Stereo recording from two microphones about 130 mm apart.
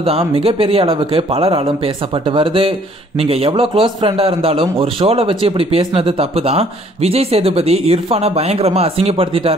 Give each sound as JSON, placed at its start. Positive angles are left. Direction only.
{"t": 0.0, "sound": "a man's voice", "side_deg": -45}